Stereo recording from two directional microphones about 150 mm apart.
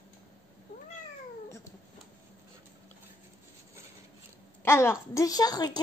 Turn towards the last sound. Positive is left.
turn(degrees=25)  # may be behind; listen again after turning